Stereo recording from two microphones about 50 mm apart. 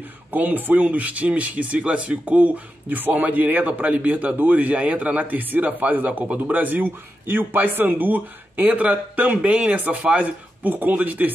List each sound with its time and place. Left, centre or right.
0.3 s speech: right
9.4 s speech: right